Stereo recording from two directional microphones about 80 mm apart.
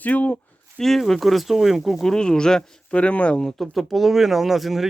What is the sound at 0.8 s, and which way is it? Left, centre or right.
Speech, centre.